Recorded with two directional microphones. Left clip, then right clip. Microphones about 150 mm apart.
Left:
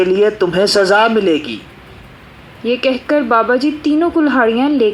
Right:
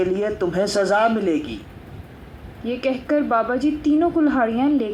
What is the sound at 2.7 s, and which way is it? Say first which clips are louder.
A man's voice: left 7 dB; 30° left (ahead or behind).